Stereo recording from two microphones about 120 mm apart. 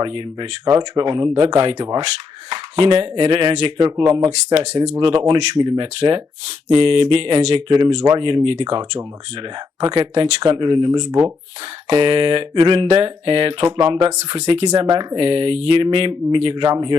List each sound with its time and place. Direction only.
0.0 s speech: 40° right (ahead or behind)
4.5 s speech: 55° right (ahead or behind); by 11.3 s 35° right (ahead or behind)
11.9 s speech: 45° right (ahead or behind)